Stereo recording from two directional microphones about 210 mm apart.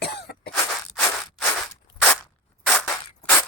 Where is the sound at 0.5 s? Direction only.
5° left (ahead or behind).